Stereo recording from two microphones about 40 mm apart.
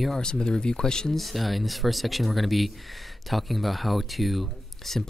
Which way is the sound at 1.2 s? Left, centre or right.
Centre.